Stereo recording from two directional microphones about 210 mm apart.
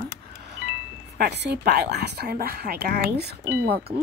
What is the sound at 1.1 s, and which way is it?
A woman's voice, 55° right (ahead or behind).